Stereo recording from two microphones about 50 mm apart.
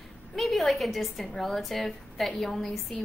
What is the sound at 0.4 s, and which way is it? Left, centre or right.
A woman's voice, centre.